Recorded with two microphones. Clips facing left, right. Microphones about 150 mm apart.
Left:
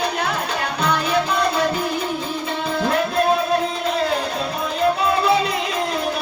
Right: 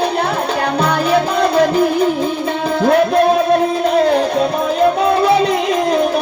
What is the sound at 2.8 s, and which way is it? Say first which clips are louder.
Music: right 9 dB; 50° right (ahead or behind).